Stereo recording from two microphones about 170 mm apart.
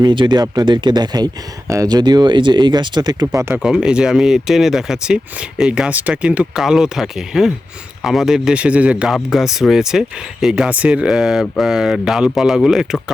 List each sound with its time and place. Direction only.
0.0 s speech: 25° right (ahead or behind)
3.5 s speech: 5° right (ahead or behind)